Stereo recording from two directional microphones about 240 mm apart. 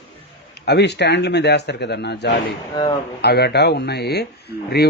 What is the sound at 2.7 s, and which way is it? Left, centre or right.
Speech, centre.